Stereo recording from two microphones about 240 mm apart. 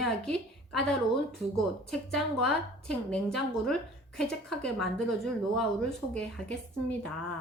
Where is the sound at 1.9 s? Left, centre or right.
Centre.